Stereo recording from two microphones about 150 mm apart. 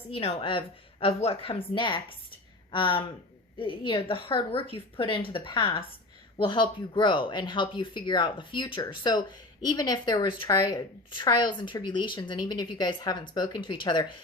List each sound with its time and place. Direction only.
0.1 s speech: 40° left (ahead or behind)